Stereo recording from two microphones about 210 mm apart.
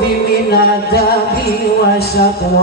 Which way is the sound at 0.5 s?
50° left (ahead or behind).